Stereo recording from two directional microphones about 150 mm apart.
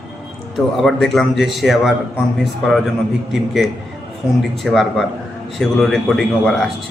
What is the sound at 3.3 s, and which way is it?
A man's voice, centre (ahead or behind).